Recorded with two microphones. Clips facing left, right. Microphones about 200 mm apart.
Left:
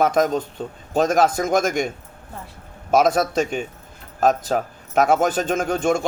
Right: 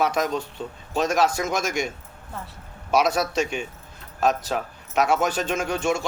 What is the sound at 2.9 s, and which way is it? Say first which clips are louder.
Speech: left 4 dB; 50° left (ahead or behind).